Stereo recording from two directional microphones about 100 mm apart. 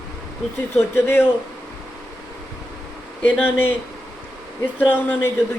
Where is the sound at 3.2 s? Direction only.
20° left (ahead or behind).